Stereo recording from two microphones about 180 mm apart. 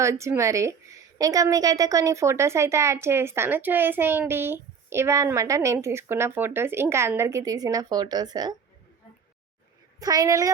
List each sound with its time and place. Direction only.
0.0 s a woman's voice: 15° right (ahead or behind)
10.0 s a woman's voice: 20° right (ahead or behind)